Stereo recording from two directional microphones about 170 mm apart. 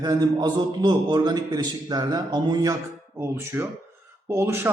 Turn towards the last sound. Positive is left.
turn(degrees=-15)  # may be behind; listen again after turning